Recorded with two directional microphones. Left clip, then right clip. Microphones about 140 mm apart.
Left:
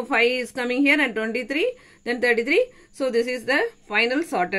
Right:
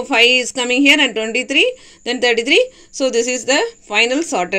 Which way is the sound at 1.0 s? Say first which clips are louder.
Right 7 dB; 20° right (ahead or behind).